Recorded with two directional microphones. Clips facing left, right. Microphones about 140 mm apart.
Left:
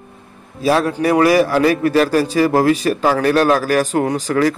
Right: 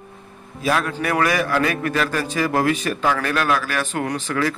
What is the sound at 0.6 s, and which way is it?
A man's voice, 30° left (ahead or behind).